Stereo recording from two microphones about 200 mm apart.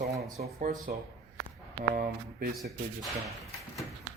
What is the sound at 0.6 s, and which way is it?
Speech, 40° right (ahead or behind).